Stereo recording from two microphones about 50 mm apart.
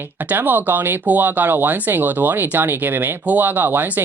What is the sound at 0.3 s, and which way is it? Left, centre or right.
Speech, right.